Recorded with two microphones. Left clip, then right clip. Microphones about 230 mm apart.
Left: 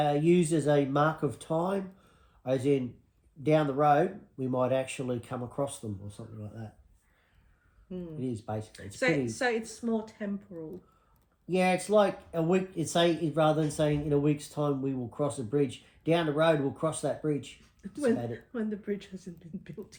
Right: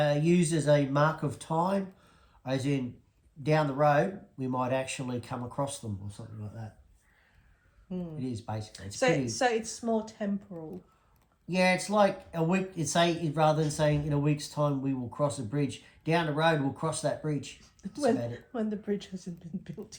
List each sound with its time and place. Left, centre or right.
0.0 s speech: right
7.9 s speech: centre
11.4 s speech: right
17.8 s speech: centre